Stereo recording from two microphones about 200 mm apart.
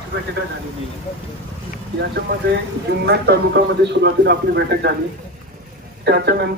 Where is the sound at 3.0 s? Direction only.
50° right (ahead or behind).